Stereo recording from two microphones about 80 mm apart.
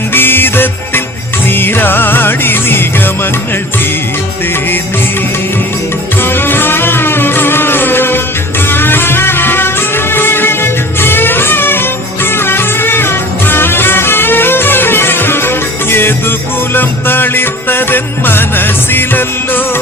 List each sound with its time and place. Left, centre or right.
0.1 s music: left
6.2 s music: left